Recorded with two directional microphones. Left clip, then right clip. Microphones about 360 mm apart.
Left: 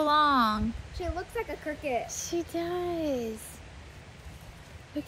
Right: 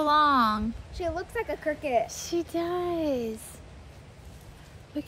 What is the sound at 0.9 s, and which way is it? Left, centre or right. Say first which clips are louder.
Speech: right 4 dB; right.